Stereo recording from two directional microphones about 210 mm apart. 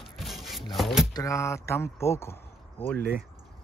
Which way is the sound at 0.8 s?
Centre (ahead or behind).